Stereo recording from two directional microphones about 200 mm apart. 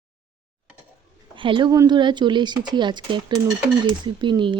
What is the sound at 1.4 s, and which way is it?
Speech, 25° right (ahead or behind).